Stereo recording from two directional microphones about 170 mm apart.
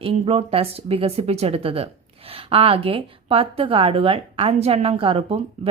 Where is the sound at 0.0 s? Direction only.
35° right (ahead or behind).